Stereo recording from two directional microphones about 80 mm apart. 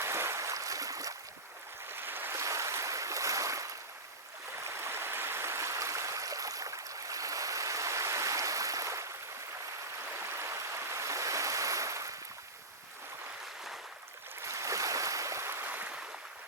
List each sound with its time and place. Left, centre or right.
0.0 s boat: right
1.9 s waves: right
2.4 s stream: right
10.0 s stream: right
14.4 s waves: right